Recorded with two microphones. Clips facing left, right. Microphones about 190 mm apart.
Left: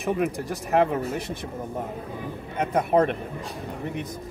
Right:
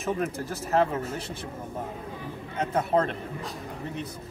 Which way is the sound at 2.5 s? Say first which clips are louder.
Left 3 dB; 15° left (ahead or behind).